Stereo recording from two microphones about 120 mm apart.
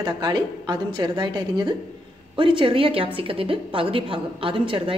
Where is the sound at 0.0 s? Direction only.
40° right (ahead or behind).